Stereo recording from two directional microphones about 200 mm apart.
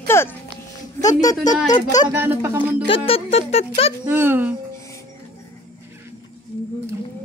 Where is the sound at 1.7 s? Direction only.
20° left (ahead or behind).